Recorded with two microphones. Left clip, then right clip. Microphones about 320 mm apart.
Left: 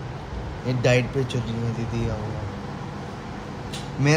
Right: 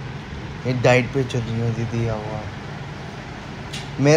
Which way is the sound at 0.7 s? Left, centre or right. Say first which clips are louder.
Right 4 dB; centre.